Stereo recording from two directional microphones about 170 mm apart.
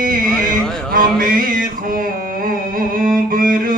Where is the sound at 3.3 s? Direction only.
55° right (ahead or behind).